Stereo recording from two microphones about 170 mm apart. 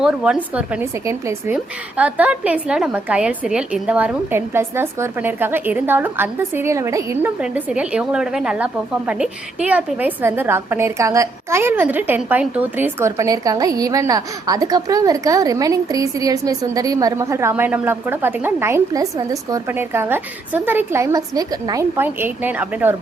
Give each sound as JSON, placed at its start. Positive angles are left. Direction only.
{"t": 0.0, "sound": "a woman's voice", "side_deg": -5}